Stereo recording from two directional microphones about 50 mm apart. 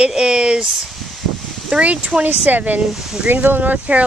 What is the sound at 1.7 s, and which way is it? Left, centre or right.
Speech, centre.